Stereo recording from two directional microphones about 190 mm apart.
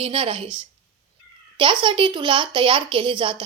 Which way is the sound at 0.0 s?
25° right (ahead or behind).